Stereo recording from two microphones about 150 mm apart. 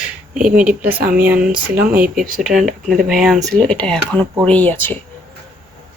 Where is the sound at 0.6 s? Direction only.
10° right (ahead or behind); by 4.9 s 10° left (ahead or behind).